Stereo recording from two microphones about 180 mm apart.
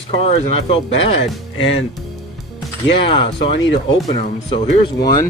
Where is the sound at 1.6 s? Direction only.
90° left.